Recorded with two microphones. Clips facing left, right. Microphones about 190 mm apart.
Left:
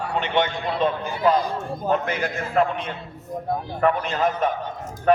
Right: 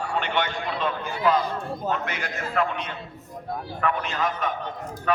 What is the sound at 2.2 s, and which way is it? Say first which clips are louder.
A man's voice: left 5 dB; 30° left (ahead or behind).